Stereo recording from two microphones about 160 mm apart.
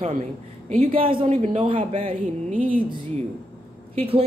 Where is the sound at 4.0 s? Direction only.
35° right (ahead or behind).